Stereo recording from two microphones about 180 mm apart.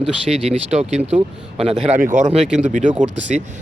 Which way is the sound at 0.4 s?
35° right (ahead or behind).